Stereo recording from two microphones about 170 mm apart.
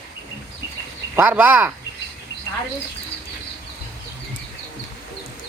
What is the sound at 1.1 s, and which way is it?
Speech, 10° right (ahead or behind).